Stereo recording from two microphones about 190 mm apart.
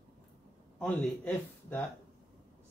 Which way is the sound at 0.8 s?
10° left (ahead or behind).